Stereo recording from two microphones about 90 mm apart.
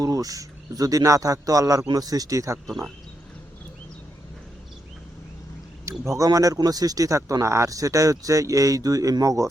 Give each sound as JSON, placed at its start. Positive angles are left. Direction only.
{"t": 0.0, "sound": "speech", "side_deg": -40}
{"t": 2.6, "sound": "speech", "side_deg": 0}
{"t": 6.1, "sound": "speech", "side_deg": -40}